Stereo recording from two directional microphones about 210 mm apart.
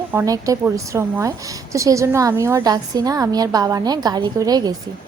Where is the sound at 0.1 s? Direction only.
15° right (ahead or behind).